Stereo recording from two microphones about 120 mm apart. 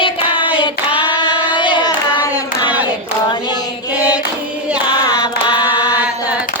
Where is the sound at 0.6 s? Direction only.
45° left (ahead or behind).